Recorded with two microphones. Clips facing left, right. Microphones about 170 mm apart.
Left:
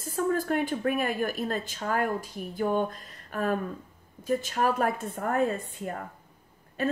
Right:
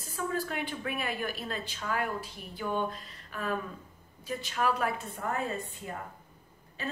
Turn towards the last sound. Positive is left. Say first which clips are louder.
# left 9 dB
turn(degrees=55)  # may be behind; listen again after turning